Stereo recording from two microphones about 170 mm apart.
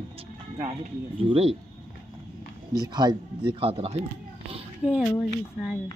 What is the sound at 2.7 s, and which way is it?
A man's voice, 25° right (ahead or behind).